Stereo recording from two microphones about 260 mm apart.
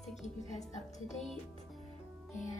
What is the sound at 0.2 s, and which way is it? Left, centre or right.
Speech, left.